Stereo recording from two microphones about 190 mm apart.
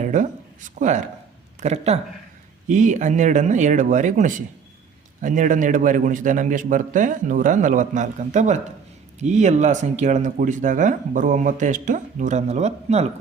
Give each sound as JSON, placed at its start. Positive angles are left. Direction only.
{"t": 0.0, "sound": "a man's voice", "side_deg": -40}